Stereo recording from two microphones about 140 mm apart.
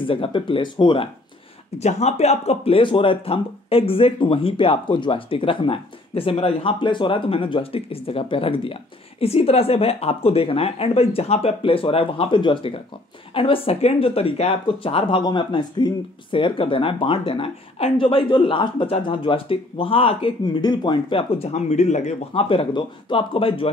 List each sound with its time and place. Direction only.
0.0 s speech: 40° left (ahead or behind)
1.8 s speech: 50° left (ahead or behind)